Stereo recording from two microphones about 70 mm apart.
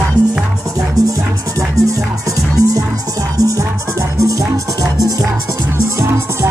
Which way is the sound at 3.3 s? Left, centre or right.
Right.